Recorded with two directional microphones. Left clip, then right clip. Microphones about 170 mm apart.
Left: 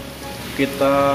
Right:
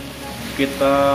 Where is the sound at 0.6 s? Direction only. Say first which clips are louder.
Even; 20° left (ahead or behind).